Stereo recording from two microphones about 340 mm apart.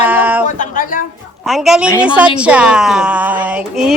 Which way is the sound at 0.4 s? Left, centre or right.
Left.